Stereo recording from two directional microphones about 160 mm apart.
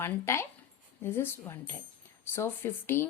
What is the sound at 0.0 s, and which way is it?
A woman's voice, 15° left (ahead or behind).